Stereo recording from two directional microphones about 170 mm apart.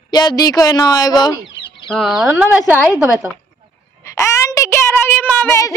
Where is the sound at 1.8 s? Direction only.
5° left (ahead or behind).